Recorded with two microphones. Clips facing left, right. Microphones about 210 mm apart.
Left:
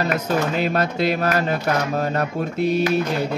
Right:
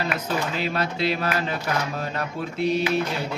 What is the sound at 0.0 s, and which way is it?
Speech, 45° left (ahead or behind).